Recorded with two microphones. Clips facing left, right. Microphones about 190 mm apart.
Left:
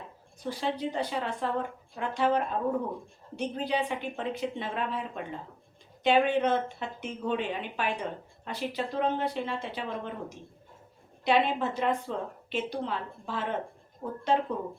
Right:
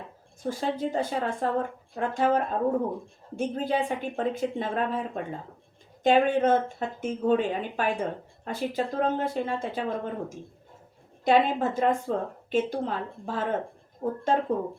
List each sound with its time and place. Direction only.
0.4 s speech: 45° right (ahead or behind)